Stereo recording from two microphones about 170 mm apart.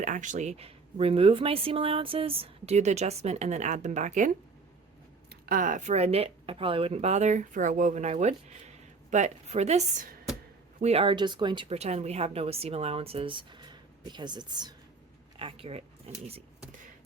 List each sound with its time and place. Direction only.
0.0 s speech: 45° right (ahead or behind)
5.5 s speech: 50° right (ahead or behind)
10.8 s speech: 35° right (ahead or behind)